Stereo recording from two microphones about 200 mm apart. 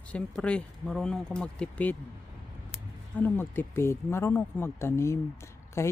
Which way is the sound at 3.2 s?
10° left (ahead or behind).